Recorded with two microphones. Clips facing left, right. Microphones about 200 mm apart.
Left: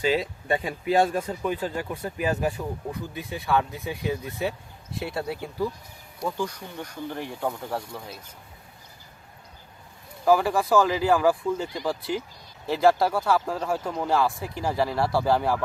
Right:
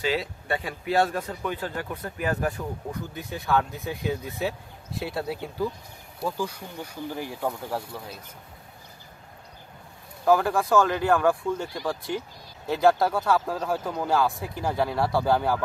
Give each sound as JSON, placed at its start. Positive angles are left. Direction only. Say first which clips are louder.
{"t": 0.1, "sound": "speech", "louder": "left 3 dB", "side_deg": 15}
{"t": 10.2, "sound": "speech", "louder": "left 1 dB", "side_deg": 5}